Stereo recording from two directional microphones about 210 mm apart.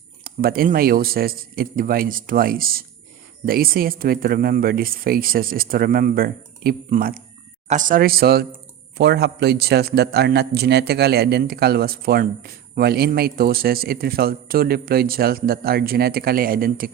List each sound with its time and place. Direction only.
0.3 s a man's voice: 45° right (ahead or behind)